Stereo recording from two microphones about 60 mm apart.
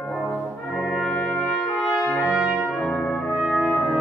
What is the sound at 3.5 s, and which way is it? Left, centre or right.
Brass instrument, centre.